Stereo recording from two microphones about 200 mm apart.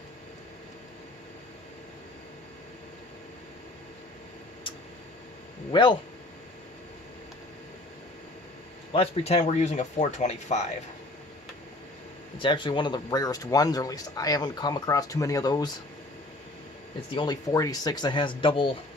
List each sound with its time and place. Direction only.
5.7 s speech: 25° left (ahead or behind)
8.9 s speech: 30° left (ahead or behind)
12.4 s speech: 25° left (ahead or behind)
17.2 s speech: 20° left (ahead or behind)